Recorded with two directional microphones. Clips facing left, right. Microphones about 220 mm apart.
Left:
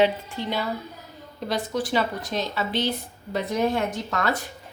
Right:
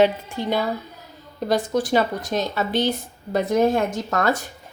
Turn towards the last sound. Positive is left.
turn(degrees=-45)  # may be behind; listen again after turning